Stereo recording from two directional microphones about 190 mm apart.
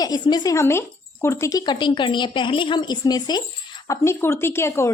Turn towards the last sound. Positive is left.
turn(degrees=15)  # may be behind; listen again after turning